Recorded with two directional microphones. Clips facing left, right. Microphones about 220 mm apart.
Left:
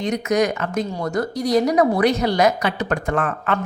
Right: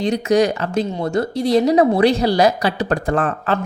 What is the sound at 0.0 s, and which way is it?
Speech, 30° right (ahead or behind).